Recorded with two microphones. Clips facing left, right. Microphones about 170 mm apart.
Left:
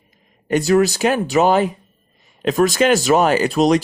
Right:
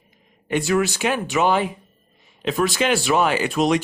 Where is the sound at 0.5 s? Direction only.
40° left (ahead or behind).